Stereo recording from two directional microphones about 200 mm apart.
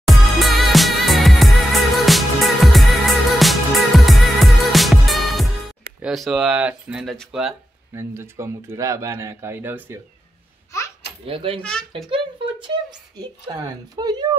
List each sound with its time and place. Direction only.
0.0 s music: centre (ahead or behind)
6.0 s speech: centre (ahead or behind)
7.9 s speech: 15° right (ahead or behind)
11.2 s speech: 25° right (ahead or behind)